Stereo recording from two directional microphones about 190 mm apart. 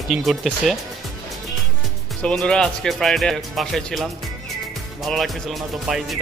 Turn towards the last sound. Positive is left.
turn(degrees=0)  # may be behind; listen again after turning